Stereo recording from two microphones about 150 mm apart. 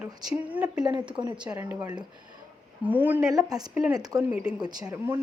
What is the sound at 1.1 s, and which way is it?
Speech, 30° right (ahead or behind).